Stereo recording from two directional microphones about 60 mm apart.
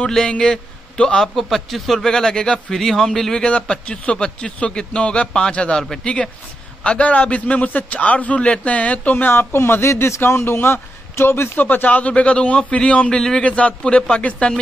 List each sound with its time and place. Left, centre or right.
0.0 s a man's voice: centre
1.3 s a man's voice: centre; by 9.3 s left
9.3 s speech: left
11.6 s a man's voice: left